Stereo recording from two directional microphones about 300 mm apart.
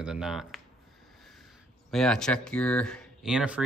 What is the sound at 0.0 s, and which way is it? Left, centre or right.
Speech, centre.